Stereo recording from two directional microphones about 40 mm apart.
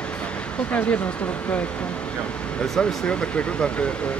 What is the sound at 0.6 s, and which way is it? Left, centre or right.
Speech, left.